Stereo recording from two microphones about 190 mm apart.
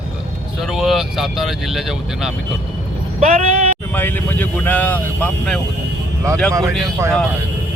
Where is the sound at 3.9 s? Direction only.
10° left (ahead or behind).